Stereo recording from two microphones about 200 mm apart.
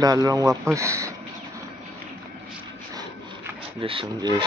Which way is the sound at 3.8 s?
25° right (ahead or behind).